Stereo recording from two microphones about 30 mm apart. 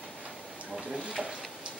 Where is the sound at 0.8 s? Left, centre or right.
Right.